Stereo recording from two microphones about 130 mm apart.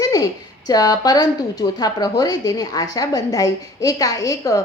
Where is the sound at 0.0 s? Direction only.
25° left (ahead or behind).